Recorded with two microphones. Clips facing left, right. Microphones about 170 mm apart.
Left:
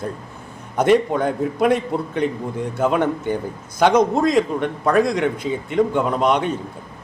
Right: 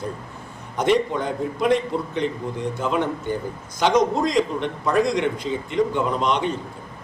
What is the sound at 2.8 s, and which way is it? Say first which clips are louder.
A man's voice: left 6 dB; 50° left (ahead or behind).